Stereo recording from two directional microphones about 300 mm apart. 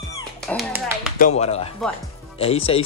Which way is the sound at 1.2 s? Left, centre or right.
Left.